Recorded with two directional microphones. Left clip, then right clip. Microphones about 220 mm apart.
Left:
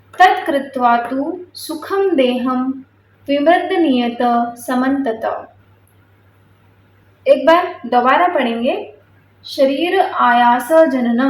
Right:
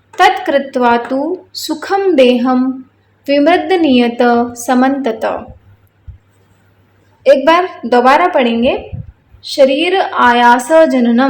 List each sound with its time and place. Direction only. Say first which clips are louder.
0.2 s a woman's voice: right 2 dB; 50° right (ahead or behind)
7.2 s a woman's voice: right 3 dB; 45° right (ahead or behind)